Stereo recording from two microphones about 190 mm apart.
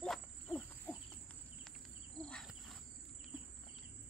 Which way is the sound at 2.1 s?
5° left (ahead or behind).